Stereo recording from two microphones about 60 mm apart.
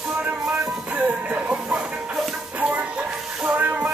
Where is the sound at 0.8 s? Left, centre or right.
Right.